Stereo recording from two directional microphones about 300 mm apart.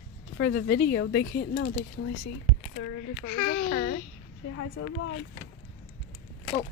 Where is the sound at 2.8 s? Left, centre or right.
Left.